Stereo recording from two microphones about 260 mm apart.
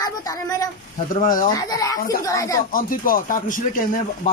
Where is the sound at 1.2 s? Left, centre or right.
Left.